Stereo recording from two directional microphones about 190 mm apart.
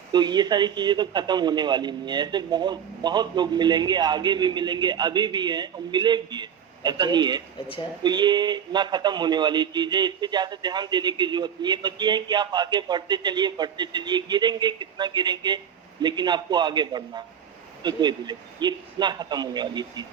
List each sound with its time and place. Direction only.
0.1 s a man's voice: 20° right (ahead or behind)